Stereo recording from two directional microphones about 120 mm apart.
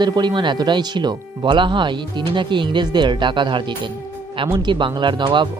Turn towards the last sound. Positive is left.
turn(degrees=-40)  # may be behind; listen again after turning